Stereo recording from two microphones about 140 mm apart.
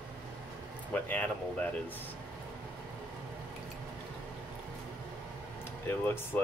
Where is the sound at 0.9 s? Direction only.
10° left (ahead or behind).